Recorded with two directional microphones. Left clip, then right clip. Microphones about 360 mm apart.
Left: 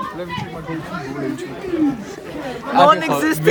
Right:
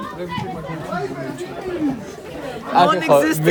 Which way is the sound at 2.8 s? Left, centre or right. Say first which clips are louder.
Left 1 dB; centre.